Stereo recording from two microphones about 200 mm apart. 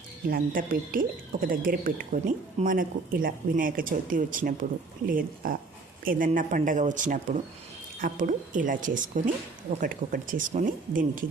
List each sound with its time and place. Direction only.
0.3 s a woman's voice: 45° right (ahead or behind)